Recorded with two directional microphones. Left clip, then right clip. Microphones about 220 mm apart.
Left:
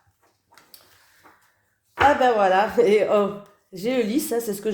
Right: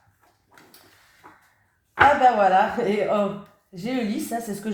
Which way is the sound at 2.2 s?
55° left (ahead or behind).